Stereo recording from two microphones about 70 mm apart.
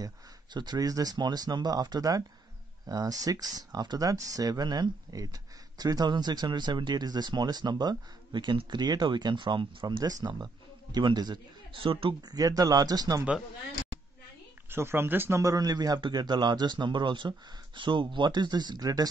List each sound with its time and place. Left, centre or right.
0.0 s speech: right
12.2 s speech: right
14.7 s speech: right
15.4 s speech: right
17.2 s speech: right
18.2 s speech: right